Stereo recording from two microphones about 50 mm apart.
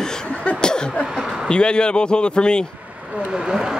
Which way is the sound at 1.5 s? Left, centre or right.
Centre.